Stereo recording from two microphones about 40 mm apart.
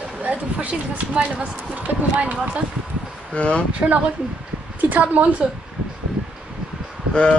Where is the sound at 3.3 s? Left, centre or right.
Left.